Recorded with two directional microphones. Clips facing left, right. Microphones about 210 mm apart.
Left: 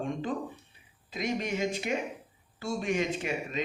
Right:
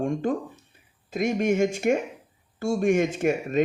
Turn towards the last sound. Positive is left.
turn(degrees=-50)  # may be behind; listen again after turning